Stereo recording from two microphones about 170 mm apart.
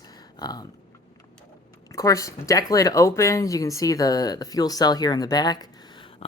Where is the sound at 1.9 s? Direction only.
20° left (ahead or behind).